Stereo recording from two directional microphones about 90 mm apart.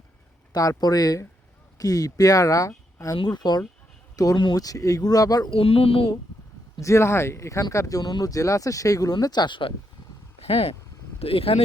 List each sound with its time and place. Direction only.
0.5 s speech: 40° left (ahead or behind)
3.2 s speech: 50° left (ahead or behind)
5.5 s a sound: 90° left
6.7 s speech: 35° left (ahead or behind)
9.1 s speech: 50° left (ahead or behind); by 9.7 s 65° left (ahead or behind)
10.5 s a sound: 90° left